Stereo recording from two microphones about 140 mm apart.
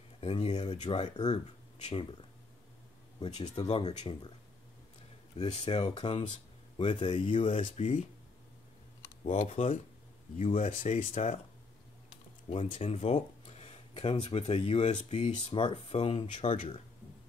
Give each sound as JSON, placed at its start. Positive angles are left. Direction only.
{"t": 0.2, "sound": "speech", "side_deg": 45}
{"t": 0.9, "sound": "speech", "side_deg": 30}
{"t": 1.2, "sound": "speech", "side_deg": 50}
{"t": 3.2, "sound": "speech", "side_deg": 50}
{"t": 5.4, "sound": "speech", "side_deg": 40}
{"t": 7.7, "sound": "speech", "side_deg": 50}
{"t": 9.2, "sound": "speech", "side_deg": 50}
{"t": 12.4, "sound": "speech", "side_deg": 50}